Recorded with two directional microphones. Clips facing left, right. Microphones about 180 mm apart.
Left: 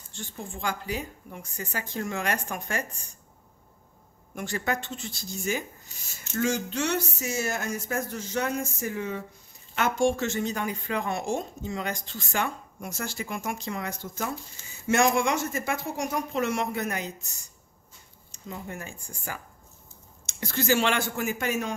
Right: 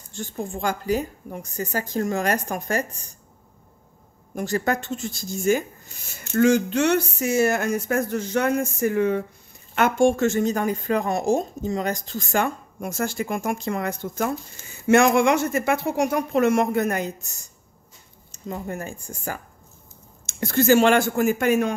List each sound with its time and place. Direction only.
0.1 s a woman's voice: 45° right (ahead or behind)
4.4 s a woman's voice: 40° right (ahead or behind)
6.3 s a woman's voice: 60° right (ahead or behind)